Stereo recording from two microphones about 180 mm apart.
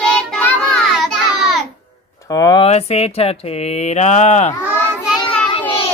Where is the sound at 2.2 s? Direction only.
20° left (ahead or behind).